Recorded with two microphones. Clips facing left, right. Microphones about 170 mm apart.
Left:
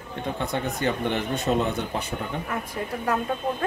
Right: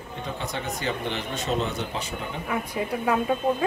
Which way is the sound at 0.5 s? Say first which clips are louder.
Left 4 dB; 55° left (ahead or behind).